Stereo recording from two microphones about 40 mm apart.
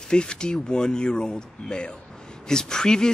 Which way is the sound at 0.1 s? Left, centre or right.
Left.